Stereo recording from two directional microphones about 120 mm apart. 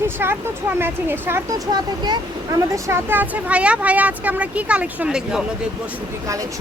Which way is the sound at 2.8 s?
20° right (ahead or behind).